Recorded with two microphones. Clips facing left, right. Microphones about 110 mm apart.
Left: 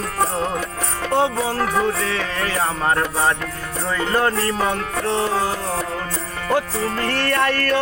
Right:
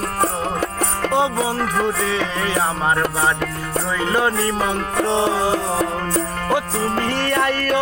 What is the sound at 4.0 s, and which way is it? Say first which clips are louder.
Music: even; 10° right (ahead or behind).